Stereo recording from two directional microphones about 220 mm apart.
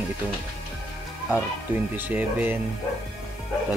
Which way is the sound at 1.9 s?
10° right (ahead or behind).